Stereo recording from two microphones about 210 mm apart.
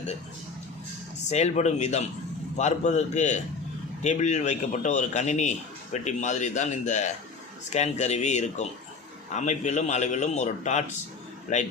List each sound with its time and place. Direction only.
1.3 s a man's voice: 30° left (ahead or behind)